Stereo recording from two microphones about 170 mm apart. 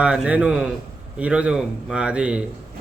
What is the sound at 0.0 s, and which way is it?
A man's voice, 5° right (ahead or behind).